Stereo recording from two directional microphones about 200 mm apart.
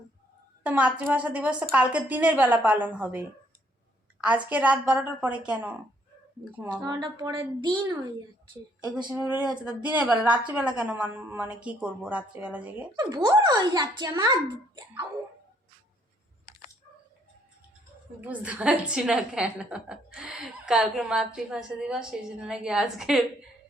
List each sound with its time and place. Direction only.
0.6 s a woman's voice: 5° right (ahead or behind)
6.8 s a child's voice: 20° right (ahead or behind)
8.9 s a woman's voice: 5° right (ahead or behind)
13.0 s a child's voice: 15° right (ahead or behind)
18.2 s a woman's voice: 5° right (ahead or behind)